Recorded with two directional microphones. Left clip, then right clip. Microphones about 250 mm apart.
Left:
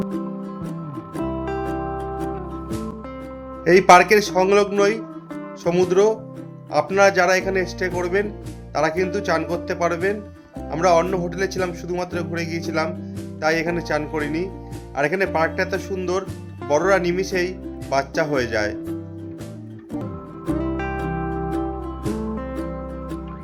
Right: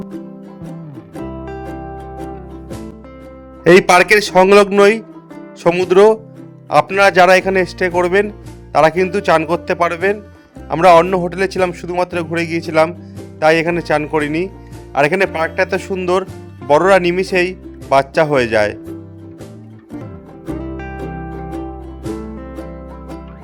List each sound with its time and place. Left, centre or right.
0.0 s music: centre
3.6 s music: right
20.5 s music: centre